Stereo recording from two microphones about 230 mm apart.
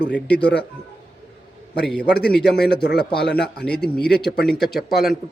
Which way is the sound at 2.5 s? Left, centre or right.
Left.